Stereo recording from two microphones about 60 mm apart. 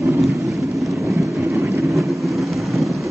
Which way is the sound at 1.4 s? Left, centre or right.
Right.